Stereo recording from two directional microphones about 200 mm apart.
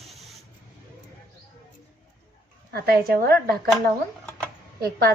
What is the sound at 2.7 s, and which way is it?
Speech, 50° right (ahead or behind).